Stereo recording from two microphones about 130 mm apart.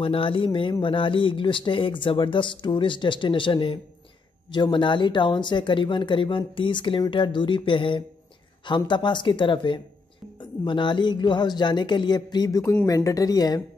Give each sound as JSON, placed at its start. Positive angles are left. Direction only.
{"t": 0.0, "sound": "speech", "side_deg": 45}